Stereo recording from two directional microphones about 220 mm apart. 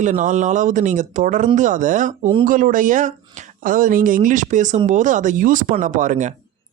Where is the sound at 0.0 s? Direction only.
35° right (ahead or behind).